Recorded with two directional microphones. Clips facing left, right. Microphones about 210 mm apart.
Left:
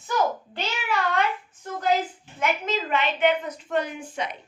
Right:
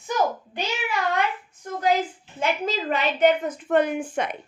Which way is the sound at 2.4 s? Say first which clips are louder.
Right 1 dB; 35° right (ahead or behind).